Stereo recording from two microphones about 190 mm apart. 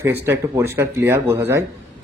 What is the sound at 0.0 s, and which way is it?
A man's voice, 15° right (ahead or behind).